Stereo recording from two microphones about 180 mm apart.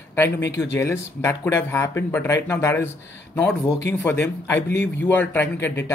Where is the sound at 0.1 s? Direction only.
15° left (ahead or behind).